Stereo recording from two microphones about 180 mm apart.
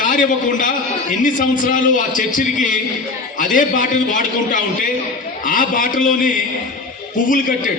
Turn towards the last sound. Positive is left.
turn(degrees=50)  # may be behind; listen again after turning